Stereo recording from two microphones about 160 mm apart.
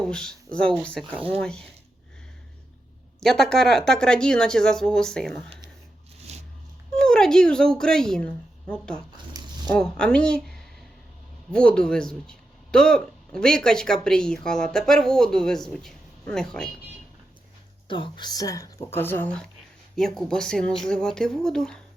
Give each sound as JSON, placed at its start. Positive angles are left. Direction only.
{"t": 0.0, "sound": "speech", "side_deg": 5}
{"t": 3.2, "sound": "speech", "side_deg": 5}
{"t": 6.3, "sound": "a sound", "side_deg": -40}
{"t": 6.9, "sound": "speech", "side_deg": 5}
{"t": 17.8, "sound": "a woman's voice", "side_deg": 30}